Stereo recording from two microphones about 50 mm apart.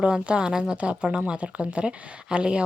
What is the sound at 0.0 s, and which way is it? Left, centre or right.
Speech, centre.